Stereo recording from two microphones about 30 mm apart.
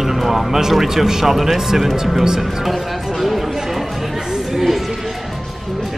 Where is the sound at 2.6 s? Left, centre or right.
Centre.